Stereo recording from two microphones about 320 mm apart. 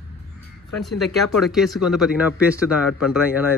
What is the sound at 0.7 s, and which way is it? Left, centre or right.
Speech, centre.